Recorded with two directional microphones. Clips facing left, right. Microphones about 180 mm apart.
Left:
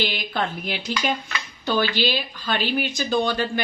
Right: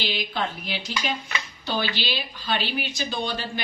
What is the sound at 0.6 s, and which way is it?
Speech, 55° left (ahead or behind).